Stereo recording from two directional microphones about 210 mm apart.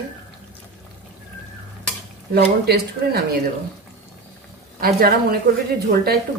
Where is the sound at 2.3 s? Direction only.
50° right (ahead or behind).